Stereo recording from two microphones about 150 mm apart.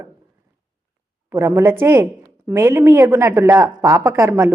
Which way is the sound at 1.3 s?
20° right (ahead or behind).